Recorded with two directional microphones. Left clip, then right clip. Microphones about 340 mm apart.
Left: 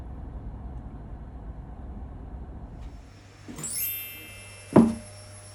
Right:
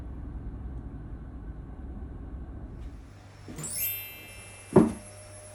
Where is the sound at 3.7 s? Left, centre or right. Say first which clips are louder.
Left 1 dB; centre.